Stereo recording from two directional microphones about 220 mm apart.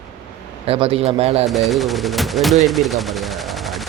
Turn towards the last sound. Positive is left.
turn(degrees=0)  # may be behind; listen again after turning